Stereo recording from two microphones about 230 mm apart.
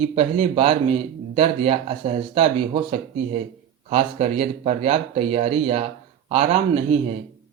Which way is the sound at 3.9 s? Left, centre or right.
Right.